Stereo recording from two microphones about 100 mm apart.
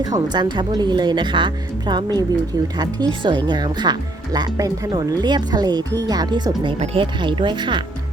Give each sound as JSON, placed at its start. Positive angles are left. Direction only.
{"t": 0.0, "sound": "speech", "side_deg": -45}
{"t": 6.7, "sound": "speech", "side_deg": -80}